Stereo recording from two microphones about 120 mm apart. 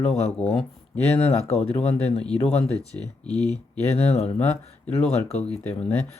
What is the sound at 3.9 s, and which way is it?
Speech, 60° left (ahead or behind).